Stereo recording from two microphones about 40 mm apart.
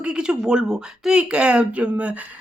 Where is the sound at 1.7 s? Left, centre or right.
Right.